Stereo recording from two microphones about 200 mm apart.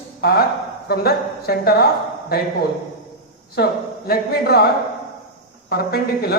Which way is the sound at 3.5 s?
50° left (ahead or behind).